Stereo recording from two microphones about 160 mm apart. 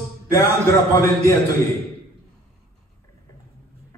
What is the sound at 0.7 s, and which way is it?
Speech, 20° left (ahead or behind).